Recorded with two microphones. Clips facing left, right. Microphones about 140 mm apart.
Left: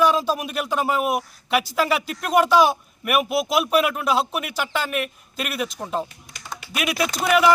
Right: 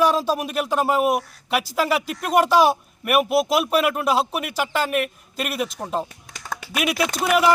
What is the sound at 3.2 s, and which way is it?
Speech, 35° right (ahead or behind).